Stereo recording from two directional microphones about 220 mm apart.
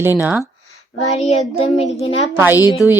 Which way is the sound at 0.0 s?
10° right (ahead or behind).